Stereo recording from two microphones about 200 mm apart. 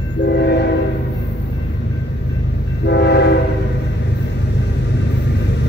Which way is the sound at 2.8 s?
60° left (ahead or behind).